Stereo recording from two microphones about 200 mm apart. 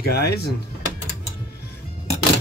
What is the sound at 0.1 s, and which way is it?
Speech, 50° left (ahead or behind).